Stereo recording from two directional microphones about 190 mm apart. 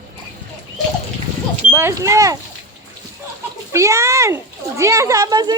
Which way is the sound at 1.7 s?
15° right (ahead or behind).